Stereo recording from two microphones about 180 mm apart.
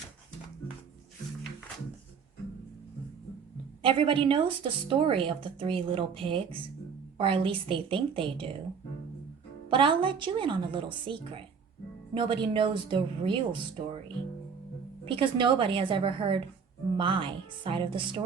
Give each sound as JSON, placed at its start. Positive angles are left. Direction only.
{"t": 3.8, "sound": "a woman's voice", "side_deg": -30}
{"t": 9.6, "sound": "a woman's voice", "side_deg": -30}
{"t": 15.0, "sound": "a woman's voice", "side_deg": -30}